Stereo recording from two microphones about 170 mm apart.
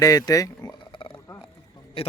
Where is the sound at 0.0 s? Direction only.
20° left (ahead or behind).